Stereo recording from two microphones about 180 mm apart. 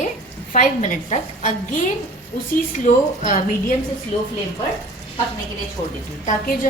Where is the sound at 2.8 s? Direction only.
45° left (ahead or behind).